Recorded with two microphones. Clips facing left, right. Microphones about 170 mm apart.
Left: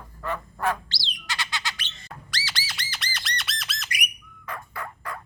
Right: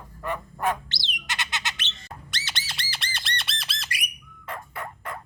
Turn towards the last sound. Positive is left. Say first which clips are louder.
# even
turn(degrees=-25)  # may be behind; listen again after turning